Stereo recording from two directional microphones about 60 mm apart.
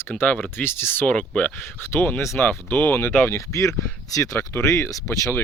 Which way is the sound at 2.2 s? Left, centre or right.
Left.